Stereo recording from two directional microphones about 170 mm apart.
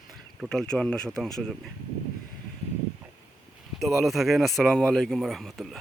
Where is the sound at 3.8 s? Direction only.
Centre (ahead or behind).